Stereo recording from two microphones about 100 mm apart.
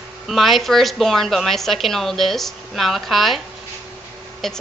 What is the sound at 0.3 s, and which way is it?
Speech, centre (ahead or behind).